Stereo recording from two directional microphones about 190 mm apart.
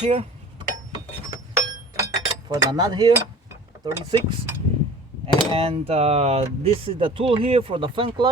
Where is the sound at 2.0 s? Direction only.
20° right (ahead or behind).